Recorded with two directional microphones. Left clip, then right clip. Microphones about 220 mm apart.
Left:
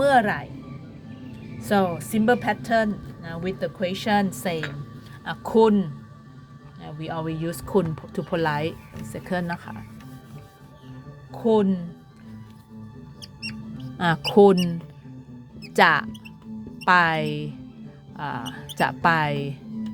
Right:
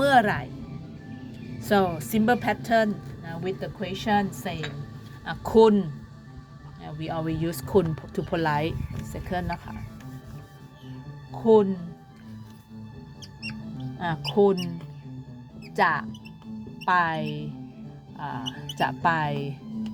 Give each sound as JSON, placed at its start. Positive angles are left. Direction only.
{"t": 0.0, "sound": "music", "side_deg": -5}
{"t": 1.5, "sound": "speech", "side_deg": 0}
{"t": 3.3, "sound": "a woman's voice", "side_deg": 15}
{"t": 5.2, "sound": "speech", "side_deg": 5}
{"t": 11.4, "sound": "a woman's voice", "side_deg": 20}
{"t": 14.0, "sound": "a woman's voice", "side_deg": 25}
{"t": 15.7, "sound": "speech", "side_deg": 20}